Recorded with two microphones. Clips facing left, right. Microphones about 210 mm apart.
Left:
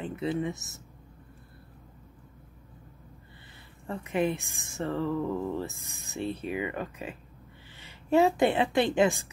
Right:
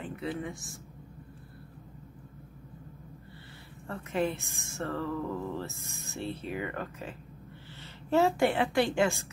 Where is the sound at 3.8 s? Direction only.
15° left (ahead or behind).